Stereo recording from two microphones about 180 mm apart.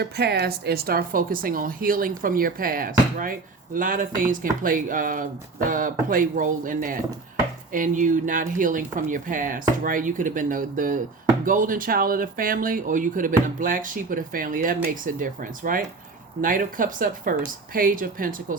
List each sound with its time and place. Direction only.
0.0 s speech: 65° right (ahead or behind)